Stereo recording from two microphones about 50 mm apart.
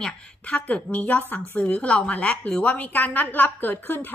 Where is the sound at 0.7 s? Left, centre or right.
Left.